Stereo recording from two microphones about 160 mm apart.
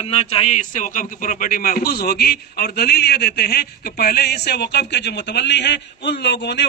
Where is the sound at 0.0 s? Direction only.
40° left (ahead or behind).